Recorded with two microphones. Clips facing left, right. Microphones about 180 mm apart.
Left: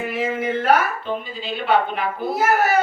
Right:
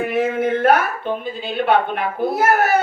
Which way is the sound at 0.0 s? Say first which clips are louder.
Right 4 dB; 55° right (ahead or behind).